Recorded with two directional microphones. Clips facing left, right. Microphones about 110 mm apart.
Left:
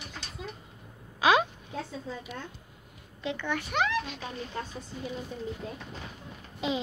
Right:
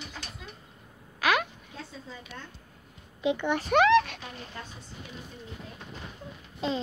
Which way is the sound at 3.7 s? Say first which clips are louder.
Right 10 dB; 75° right (ahead or behind).